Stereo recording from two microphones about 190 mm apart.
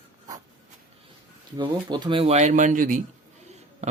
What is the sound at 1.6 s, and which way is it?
Speech, 25° right (ahead or behind).